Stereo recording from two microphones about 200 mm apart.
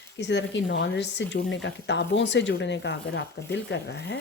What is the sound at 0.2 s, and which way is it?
Speech, 60° left (ahead or behind).